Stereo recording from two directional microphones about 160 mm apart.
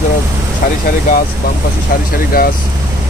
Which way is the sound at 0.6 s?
60° left (ahead or behind).